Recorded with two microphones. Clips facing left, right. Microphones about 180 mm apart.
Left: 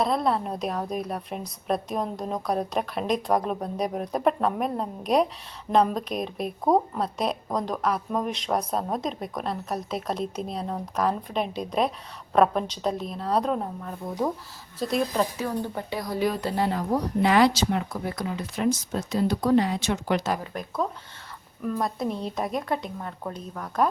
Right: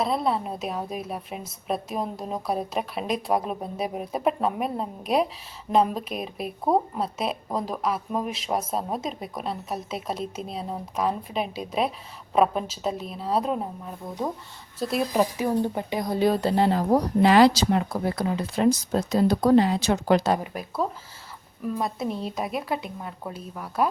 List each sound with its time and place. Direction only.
0.0 s speech: centre (ahead or behind)
15.1 s speech: 15° right (ahead or behind); by 20.4 s 30° right (ahead or behind)
20.4 s speech: 5° right (ahead or behind)